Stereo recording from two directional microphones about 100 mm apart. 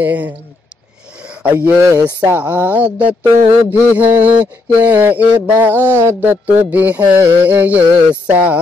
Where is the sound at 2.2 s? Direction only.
20° right (ahead or behind).